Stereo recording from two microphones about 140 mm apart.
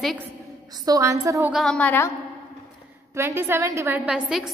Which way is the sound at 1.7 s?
15° left (ahead or behind).